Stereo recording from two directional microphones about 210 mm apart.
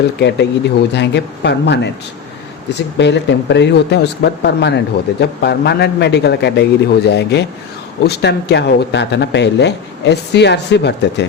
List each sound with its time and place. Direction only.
0.2 s speech: 55° left (ahead or behind)
3.0 s a man's voice: 55° left (ahead or behind)